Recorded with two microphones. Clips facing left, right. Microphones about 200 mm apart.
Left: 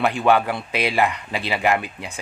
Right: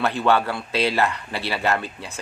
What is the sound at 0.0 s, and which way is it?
Speech, 15° left (ahead or behind).